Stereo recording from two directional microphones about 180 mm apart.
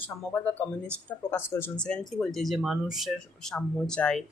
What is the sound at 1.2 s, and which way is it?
Speech, 10° left (ahead or behind).